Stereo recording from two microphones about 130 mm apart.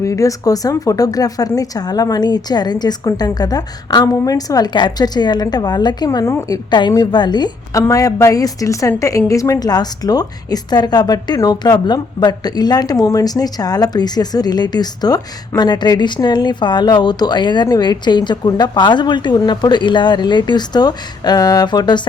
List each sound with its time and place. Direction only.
0.0 s a woman's voice: 25° left (ahead or behind)
6.7 s a woman's voice: 35° left (ahead or behind)